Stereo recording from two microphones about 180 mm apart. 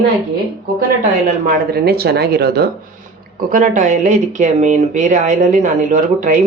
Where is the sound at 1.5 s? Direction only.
60° right (ahead or behind).